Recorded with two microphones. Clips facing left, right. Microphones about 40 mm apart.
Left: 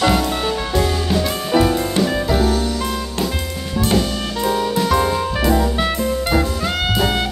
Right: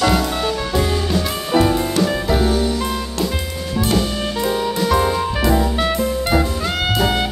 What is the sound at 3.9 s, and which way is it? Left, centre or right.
Music, centre.